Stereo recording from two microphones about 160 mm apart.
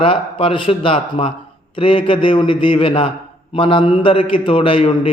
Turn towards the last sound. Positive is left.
turn(degrees=35)  # may be behind; listen again after turning